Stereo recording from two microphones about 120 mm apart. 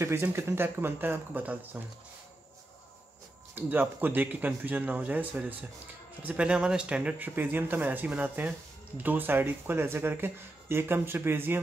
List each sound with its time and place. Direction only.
0.0 s speech: 20° right (ahead or behind)
3.5 s speech: 15° right (ahead or behind)